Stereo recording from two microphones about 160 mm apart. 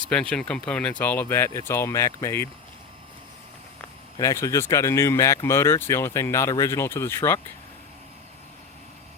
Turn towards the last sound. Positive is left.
turn(degrees=15)  # may be behind; listen again after turning